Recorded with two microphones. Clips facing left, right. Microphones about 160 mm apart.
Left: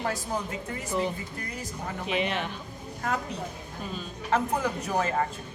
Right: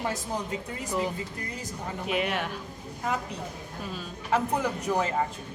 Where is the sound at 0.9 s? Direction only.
5° right (ahead or behind).